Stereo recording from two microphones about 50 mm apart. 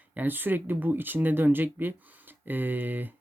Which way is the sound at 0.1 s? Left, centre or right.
Right.